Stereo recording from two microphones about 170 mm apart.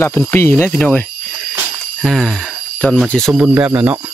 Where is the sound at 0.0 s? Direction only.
10° left (ahead or behind); by 4.0 s 5° right (ahead or behind).